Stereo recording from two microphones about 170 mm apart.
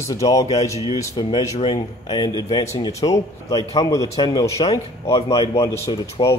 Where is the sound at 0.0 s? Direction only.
20° left (ahead or behind).